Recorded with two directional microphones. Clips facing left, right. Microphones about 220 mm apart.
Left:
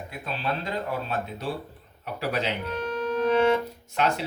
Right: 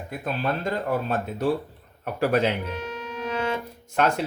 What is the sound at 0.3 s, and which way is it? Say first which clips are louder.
Speech: right 4 dB; 50° right (ahead or behind).